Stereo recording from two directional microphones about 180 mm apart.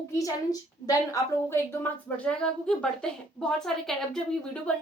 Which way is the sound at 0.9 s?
20° left (ahead or behind).